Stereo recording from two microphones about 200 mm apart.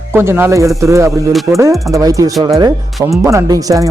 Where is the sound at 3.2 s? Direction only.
15° right (ahead or behind).